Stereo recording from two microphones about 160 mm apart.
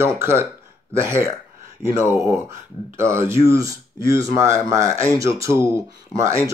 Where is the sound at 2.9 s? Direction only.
15° right (ahead or behind).